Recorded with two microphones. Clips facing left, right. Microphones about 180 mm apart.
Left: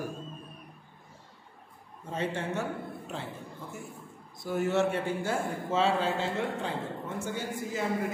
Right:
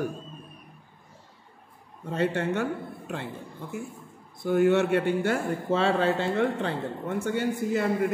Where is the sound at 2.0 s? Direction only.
70° right (ahead or behind).